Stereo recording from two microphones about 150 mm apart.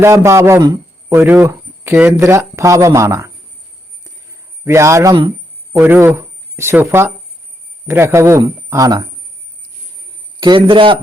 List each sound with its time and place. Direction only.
0.0 s speech: 20° right (ahead or behind)
4.0 s a sound: 20° right (ahead or behind)
5.7 s speech: 15° right (ahead or behind)
10.4 s a man's voice: 30° right (ahead or behind)